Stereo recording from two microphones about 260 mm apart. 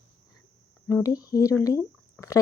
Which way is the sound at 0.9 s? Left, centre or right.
Centre.